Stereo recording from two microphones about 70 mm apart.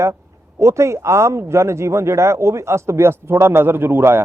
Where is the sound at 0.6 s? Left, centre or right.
Right.